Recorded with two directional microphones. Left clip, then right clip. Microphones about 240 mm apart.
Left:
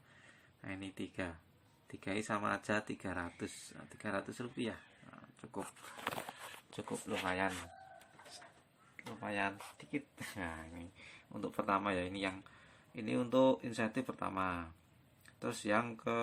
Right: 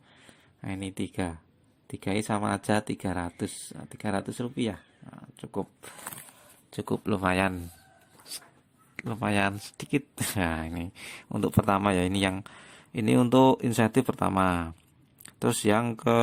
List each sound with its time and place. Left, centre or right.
0.6 s speech: right
7.3 s speech: right
9.0 s speech: right